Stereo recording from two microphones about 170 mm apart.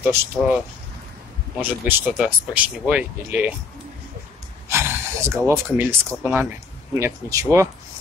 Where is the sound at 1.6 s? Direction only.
10° right (ahead or behind).